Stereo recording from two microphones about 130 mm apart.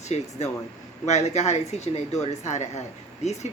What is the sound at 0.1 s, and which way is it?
Speech, 60° left (ahead or behind).